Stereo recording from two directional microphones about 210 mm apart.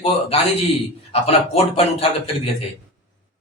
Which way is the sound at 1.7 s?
30° left (ahead or behind).